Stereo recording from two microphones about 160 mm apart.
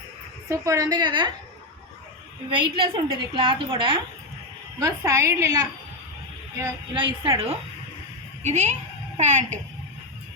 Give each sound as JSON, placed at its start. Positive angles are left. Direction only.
{"t": 0.4, "sound": "a woman's voice", "side_deg": -20}
{"t": 2.5, "sound": "a woman's voice", "side_deg": -30}
{"t": 4.8, "sound": "a woman's voice", "side_deg": -20}
{"t": 8.4, "sound": "a child's voice", "side_deg": -45}